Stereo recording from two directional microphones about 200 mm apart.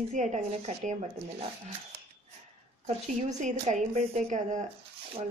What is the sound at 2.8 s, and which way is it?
A woman's voice, 35° right (ahead or behind).